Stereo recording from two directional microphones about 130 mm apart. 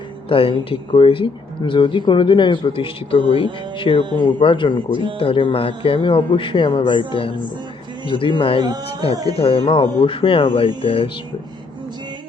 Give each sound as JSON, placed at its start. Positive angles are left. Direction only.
{"t": 0.3, "sound": "speech", "side_deg": 45}